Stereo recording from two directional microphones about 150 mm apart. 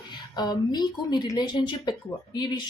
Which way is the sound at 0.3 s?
30° left (ahead or behind).